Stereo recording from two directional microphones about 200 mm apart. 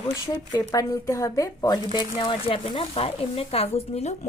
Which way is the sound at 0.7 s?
15° left (ahead or behind).